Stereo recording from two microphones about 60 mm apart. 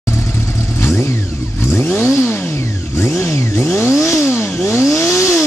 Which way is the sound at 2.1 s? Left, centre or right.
Left.